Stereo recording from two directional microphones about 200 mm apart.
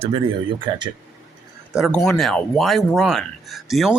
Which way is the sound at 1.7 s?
Centre (ahead or behind).